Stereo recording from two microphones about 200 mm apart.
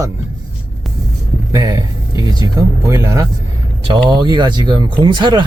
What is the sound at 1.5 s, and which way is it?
Speech, 15° right (ahead or behind).